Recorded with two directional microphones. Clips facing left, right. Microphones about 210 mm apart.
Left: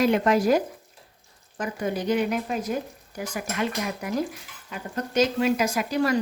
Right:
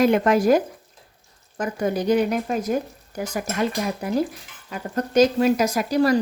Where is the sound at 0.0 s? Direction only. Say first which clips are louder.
Right 3 dB; 50° right (ahead or behind).